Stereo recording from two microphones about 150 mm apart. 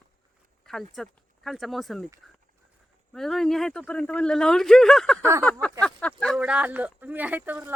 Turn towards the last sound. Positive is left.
turn(degrees=-10)  # may be behind; listen again after turning